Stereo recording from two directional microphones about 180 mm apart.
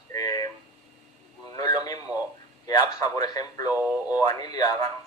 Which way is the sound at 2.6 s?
20° left (ahead or behind).